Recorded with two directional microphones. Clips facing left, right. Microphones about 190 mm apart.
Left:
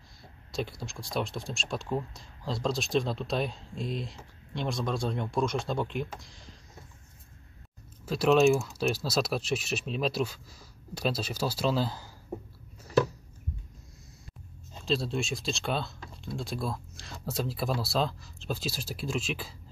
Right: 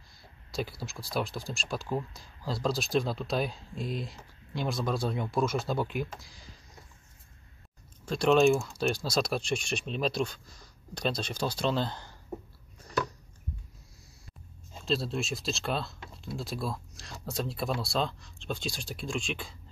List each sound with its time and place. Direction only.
0.2 s speech: centre (ahead or behind)
8.0 s speech: 5° left (ahead or behind)
14.7 s speech: centre (ahead or behind)